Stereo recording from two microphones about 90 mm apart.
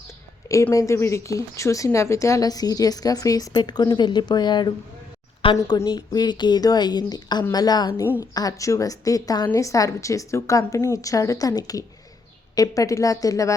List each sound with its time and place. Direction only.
0.7 s a woman's voice: 40° left (ahead or behind); by 4.7 s 55° left (ahead or behind)
5.4 s a woman's voice: 90° left
6.1 s a woman's voice: 50° left (ahead or behind)